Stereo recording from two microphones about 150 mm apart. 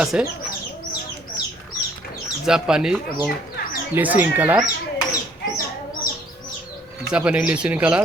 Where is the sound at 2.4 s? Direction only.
5° right (ahead or behind).